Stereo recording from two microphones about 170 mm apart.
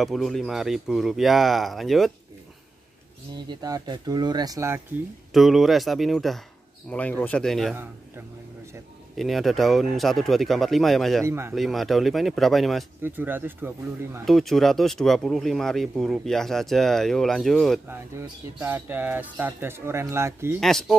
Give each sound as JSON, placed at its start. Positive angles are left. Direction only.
{"t": 0.0, "sound": "speech", "side_deg": 0}
{"t": 3.4, "sound": "speech", "side_deg": -25}
{"t": 5.3, "sound": "speech", "side_deg": 0}
{"t": 9.1, "sound": "speech", "side_deg": 0}
{"t": 11.2, "sound": "speech", "side_deg": -15}
{"t": 11.5, "sound": "speech", "side_deg": 0}
{"t": 13.0, "sound": "speech", "side_deg": -10}
{"t": 14.2, "sound": "speech", "side_deg": 0}
{"t": 17.8, "sound": "speech", "side_deg": -10}
{"t": 20.6, "sound": "speech", "side_deg": 0}